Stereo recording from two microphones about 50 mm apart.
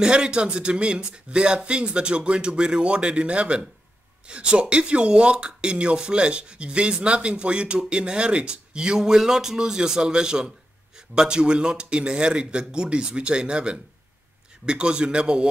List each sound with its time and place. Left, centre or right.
0.0 s a man's voice: centre